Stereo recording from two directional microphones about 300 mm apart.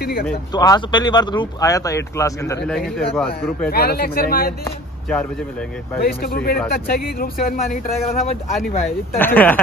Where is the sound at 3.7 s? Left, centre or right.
Left.